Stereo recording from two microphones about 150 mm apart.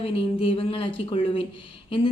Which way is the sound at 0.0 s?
35° left (ahead or behind).